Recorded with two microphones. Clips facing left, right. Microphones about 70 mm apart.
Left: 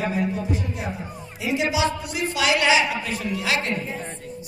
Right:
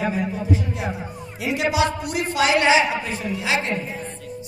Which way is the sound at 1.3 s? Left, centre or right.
Right.